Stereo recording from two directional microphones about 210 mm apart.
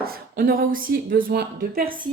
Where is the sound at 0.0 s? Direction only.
45° right (ahead or behind).